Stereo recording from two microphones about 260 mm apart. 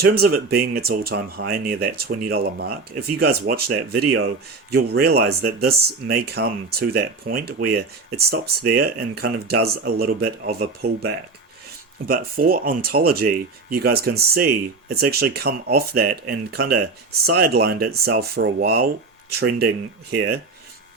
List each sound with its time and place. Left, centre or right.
0.0 s speech: right